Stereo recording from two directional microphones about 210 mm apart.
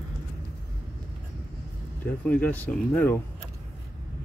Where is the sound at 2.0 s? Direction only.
5° left (ahead or behind).